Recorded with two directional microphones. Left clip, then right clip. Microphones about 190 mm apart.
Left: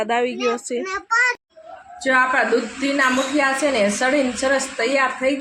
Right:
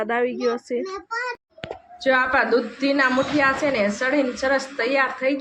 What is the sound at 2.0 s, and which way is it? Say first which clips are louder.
Speech: left 2 dB; 15° left (ahead or behind).